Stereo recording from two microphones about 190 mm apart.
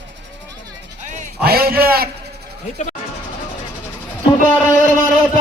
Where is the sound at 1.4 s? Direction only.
55° right (ahead or behind).